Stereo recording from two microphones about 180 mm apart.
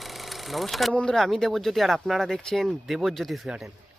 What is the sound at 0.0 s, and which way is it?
Speech, centre (ahead or behind).